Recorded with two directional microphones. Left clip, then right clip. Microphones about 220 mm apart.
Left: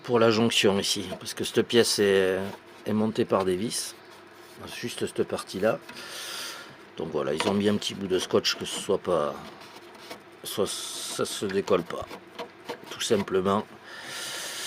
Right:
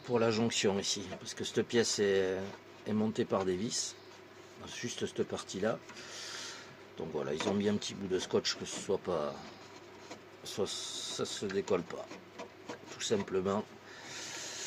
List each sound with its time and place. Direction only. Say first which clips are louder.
0.0 s speech: left 9 dB; 40° left (ahead or behind)
4.6 s rub: left 6 dB; 25° left (ahead or behind)
6.9 s speech: left 9 dB; 35° left (ahead or behind)
10.4 s speech: left 8 dB; 35° left (ahead or behind)
12.9 s a sound: left 8 dB; 40° left (ahead or behind)